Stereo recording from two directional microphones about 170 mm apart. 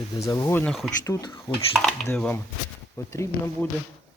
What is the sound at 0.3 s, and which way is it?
Speech, 20° left (ahead or behind).